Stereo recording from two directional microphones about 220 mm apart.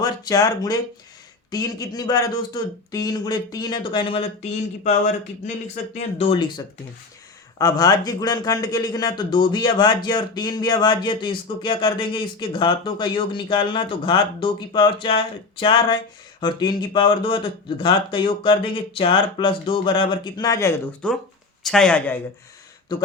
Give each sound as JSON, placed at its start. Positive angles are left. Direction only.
{"t": 0.0, "sound": "speech", "side_deg": 15}
{"t": 4.8, "sound": "speech", "side_deg": 30}
{"t": 7.6, "sound": "speech", "side_deg": 15}
{"t": 21.6, "sound": "speech", "side_deg": 5}
{"t": 22.9, "sound": "speech", "side_deg": 20}